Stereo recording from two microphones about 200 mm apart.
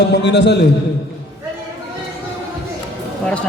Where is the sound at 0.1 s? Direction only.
60° left (ahead or behind).